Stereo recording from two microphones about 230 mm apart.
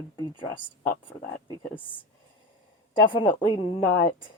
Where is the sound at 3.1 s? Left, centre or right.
Left.